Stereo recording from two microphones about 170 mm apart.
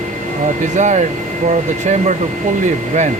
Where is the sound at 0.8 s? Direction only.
45° right (ahead or behind).